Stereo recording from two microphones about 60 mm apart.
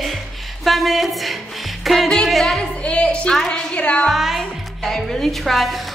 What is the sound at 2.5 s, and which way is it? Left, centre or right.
A woman's voice, centre.